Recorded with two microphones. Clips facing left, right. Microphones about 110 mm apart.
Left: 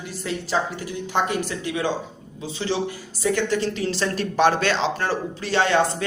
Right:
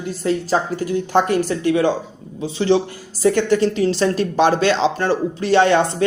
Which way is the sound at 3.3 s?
30° right (ahead or behind).